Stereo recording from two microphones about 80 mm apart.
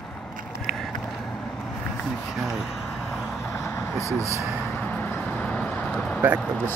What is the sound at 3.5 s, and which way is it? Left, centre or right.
Vehicle, left.